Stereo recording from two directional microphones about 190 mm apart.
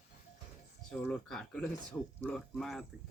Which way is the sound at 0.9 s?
5° left (ahead or behind).